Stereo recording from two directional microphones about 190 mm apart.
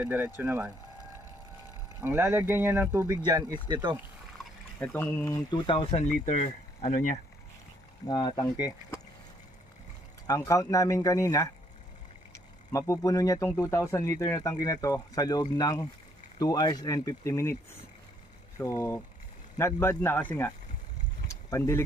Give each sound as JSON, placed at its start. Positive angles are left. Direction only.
{"t": 0.0, "sound": "speech", "side_deg": -10}
{"t": 2.0, "sound": "speech", "side_deg": -10}
{"t": 4.8, "sound": "speech", "side_deg": 10}
{"t": 5.5, "sound": "speech", "side_deg": 25}
{"t": 8.0, "sound": "speech", "side_deg": 20}
{"t": 10.2, "sound": "speech", "side_deg": 15}
{"t": 18.6, "sound": "speech", "side_deg": 15}
{"t": 21.5, "sound": "speech", "side_deg": 15}